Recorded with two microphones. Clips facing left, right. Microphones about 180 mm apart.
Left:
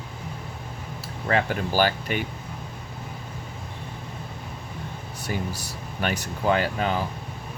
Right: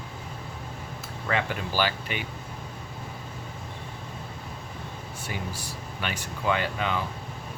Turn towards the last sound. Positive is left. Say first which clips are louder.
# left 4 dB
turn(degrees=40)  # may be behind; listen again after turning